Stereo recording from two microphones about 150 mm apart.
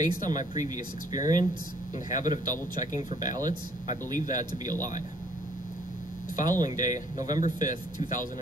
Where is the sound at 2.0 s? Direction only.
25° right (ahead or behind).